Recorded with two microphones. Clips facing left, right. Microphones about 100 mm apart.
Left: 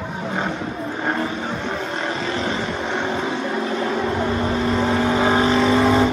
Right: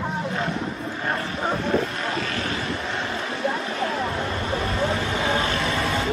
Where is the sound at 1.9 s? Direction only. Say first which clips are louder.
Left 3 dB; 30° left (ahead or behind).